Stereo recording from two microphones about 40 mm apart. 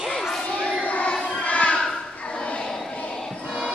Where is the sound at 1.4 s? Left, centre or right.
Left.